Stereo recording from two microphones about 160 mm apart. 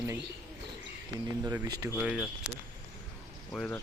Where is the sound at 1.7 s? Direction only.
20° right (ahead or behind).